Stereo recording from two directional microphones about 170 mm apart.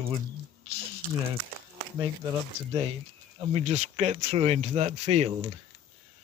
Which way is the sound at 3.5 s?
35° right (ahead or behind).